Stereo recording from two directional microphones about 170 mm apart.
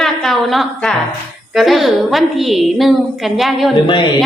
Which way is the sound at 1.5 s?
Centre (ahead or behind).